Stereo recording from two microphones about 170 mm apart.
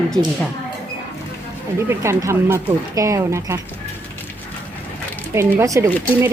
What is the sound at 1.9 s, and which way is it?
Speech, 15° right (ahead or behind).